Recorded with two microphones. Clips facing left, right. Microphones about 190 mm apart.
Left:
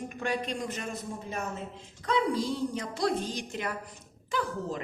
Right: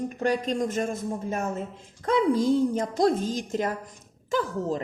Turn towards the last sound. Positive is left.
turn(degrees=-40)  # may be behind; listen again after turning